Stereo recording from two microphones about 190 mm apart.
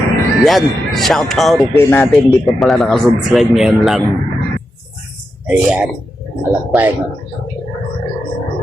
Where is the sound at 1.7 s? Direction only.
15° left (ahead or behind).